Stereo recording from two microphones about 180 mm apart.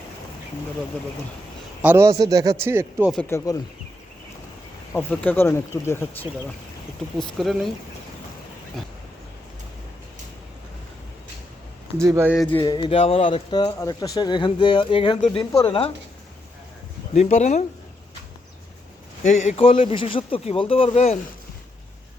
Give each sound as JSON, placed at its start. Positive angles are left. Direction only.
{"t": 1.8, "sound": "a man's voice", "side_deg": -10}
{"t": 3.2, "sound": "speech", "side_deg": 15}
{"t": 4.9, "sound": "speech", "side_deg": 10}
{"t": 7.2, "sound": "speech", "side_deg": 0}
{"t": 12.0, "sound": "a man's voice", "side_deg": -15}
{"t": 12.4, "sound": "speech", "side_deg": 10}
{"t": 12.6, "sound": "speech", "side_deg": 25}
{"t": 17.2, "sound": "speech", "side_deg": 40}
{"t": 19.3, "sound": "speech", "side_deg": 40}